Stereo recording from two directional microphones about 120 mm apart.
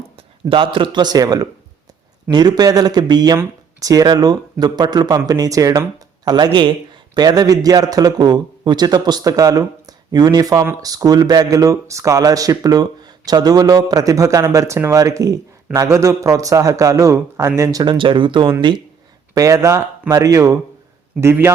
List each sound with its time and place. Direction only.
0.4 s speech: 45° right (ahead or behind); by 17.9 s 30° right (ahead or behind)
17.9 s speech: 45° right (ahead or behind)
19.3 s speech: 30° right (ahead or behind)